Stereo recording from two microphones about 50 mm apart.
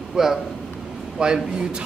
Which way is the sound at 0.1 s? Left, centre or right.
Centre.